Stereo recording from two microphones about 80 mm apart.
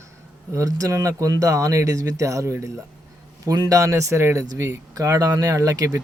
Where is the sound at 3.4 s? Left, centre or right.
Right.